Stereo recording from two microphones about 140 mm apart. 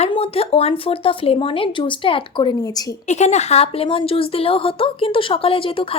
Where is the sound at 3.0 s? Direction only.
55° left (ahead or behind).